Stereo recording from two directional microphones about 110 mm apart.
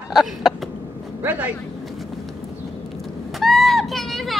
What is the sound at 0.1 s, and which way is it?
Cough, centre (ahead or behind).